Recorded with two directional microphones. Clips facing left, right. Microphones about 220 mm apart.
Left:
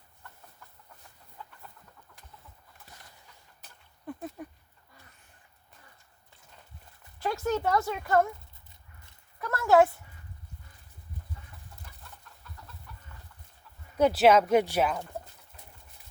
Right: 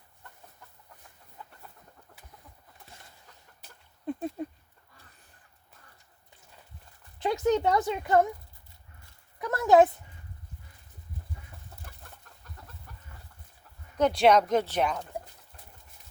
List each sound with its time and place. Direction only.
4.0 s a sound: 25° right (ahead or behind)
7.2 s speech: 20° right (ahead or behind)
9.4 s a woman's voice: 20° right (ahead or behind)
14.0 s speech: 5° left (ahead or behind)